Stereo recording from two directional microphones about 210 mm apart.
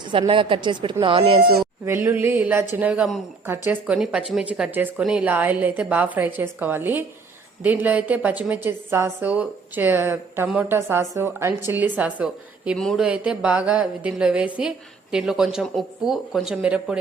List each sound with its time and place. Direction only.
0.0 s a woman's voice: 25° right (ahead or behind)
1.8 s a woman's voice: 10° right (ahead or behind)